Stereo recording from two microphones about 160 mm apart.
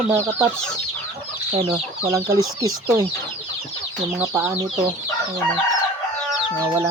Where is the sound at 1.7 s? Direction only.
20° right (ahead or behind).